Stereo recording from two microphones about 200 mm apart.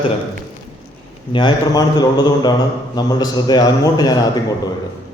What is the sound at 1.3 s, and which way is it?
A man's voice, 25° left (ahead or behind).